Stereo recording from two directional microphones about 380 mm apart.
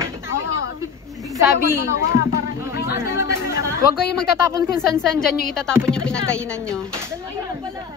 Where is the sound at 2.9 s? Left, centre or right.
Centre.